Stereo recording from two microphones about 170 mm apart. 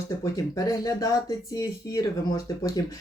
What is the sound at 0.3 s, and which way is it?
Speech, 20° left (ahead or behind).